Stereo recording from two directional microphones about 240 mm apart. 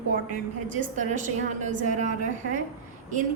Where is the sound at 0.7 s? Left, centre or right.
Right.